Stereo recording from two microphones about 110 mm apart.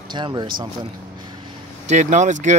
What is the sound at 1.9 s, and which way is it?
Speech, 90° right.